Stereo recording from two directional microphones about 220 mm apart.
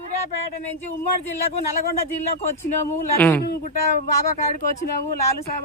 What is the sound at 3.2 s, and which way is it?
Speech, 10° left (ahead or behind).